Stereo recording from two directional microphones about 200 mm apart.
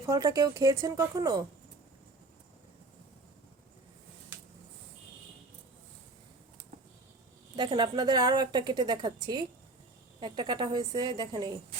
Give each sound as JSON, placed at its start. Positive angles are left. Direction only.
{"t": 0.0, "sound": "speech", "side_deg": -15}
{"t": 7.5, "sound": "a woman's voice", "side_deg": -25}